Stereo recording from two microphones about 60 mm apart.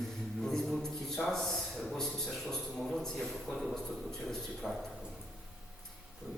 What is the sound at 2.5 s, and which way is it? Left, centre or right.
Speech, centre.